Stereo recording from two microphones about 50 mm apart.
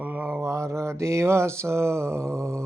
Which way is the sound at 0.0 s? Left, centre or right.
Right.